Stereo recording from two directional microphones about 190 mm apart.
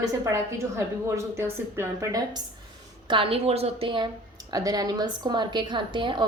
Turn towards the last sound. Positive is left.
turn(degrees=-25)  # may be behind; listen again after turning